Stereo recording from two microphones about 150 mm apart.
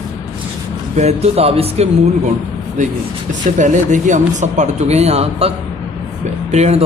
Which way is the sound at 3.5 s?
55° right (ahead or behind).